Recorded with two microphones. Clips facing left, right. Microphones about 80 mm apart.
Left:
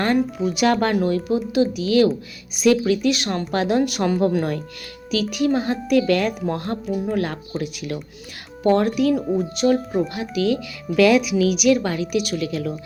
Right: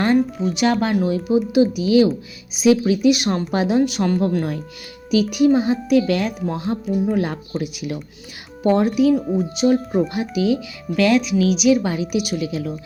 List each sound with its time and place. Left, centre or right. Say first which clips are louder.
0.0 s speech: right 2 dB; centre
3.7 s a woman's voice: right 2 dB; centre
5.1 s speech: right 5 dB; centre
5.5 s a woman's voice: right 2 dB; centre
10.3 s speech: right 1 dB; centre
10.8 s a woman's voice: left 2 dB; centre
11.7 s speech: right 1 dB; centre